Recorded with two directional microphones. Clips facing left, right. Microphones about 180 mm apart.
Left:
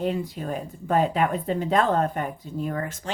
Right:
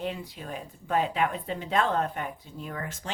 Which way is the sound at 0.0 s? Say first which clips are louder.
Left 7 dB; 45° left (ahead or behind).